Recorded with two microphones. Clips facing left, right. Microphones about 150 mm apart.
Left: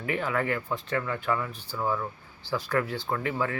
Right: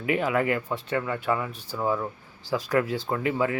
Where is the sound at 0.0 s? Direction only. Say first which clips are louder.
Right 4 dB; 15° right (ahead or behind).